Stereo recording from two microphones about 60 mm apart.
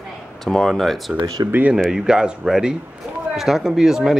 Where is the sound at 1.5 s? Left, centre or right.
Right.